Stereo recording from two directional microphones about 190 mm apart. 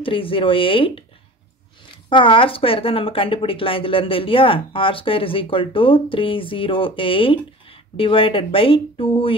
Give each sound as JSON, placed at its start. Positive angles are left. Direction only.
{"t": 0.0, "sound": "speech", "side_deg": 30}
{"t": 2.0, "sound": "speech", "side_deg": 25}